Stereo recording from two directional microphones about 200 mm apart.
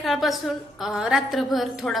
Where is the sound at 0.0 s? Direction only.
Centre (ahead or behind).